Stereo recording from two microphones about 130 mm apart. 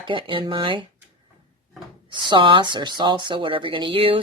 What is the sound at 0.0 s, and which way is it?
Speech, 40° right (ahead or behind).